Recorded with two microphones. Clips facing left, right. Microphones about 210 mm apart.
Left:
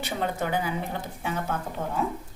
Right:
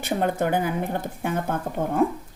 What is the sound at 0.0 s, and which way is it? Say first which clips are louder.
Speech: right 5 dB; 50° right (ahead or behind).